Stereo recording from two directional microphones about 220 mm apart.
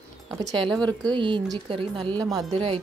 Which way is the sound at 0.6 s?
5° left (ahead or behind).